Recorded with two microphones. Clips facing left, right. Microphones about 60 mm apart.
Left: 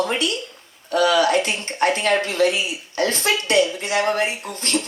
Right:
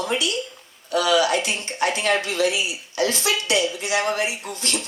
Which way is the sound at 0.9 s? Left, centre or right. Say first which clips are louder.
Left 2 dB; left.